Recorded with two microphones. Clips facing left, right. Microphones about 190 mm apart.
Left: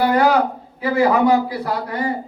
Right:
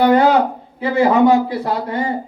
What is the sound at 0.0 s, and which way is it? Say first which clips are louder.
A man's voice: right 3 dB; 25° right (ahead or behind).